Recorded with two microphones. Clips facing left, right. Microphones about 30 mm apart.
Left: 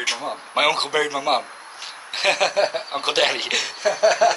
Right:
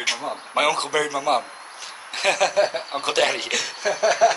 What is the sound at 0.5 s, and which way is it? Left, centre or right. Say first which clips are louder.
A man's voice: left 1 dB; left.